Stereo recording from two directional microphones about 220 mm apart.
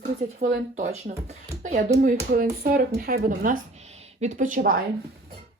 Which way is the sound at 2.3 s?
45° right (ahead or behind).